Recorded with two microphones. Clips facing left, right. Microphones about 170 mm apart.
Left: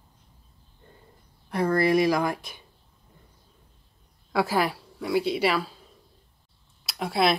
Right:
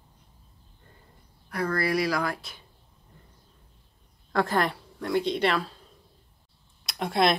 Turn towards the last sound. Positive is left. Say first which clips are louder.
# even
turn(degrees=5)  # may be behind; listen again after turning